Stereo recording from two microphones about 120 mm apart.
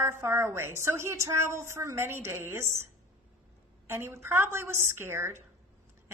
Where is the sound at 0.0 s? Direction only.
20° right (ahead or behind).